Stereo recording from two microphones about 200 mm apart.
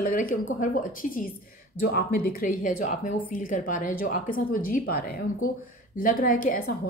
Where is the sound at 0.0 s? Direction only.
45° left (ahead or behind).